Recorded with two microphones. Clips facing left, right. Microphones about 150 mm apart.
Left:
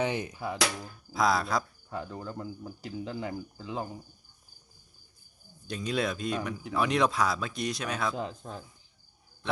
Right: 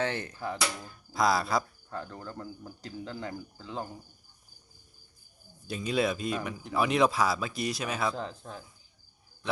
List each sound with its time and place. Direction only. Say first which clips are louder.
0.0 s cricket: left 1 dB; 15° left (ahead or behind)
0.8 s speech: even; centre (ahead or behind)
1.9 s cricket: left 2 dB; 10° left (ahead or behind)
5.6 s speech: right 2 dB; 5° right (ahead or behind)
8.3 s a man's voice: left 2 dB; 35° left (ahead or behind)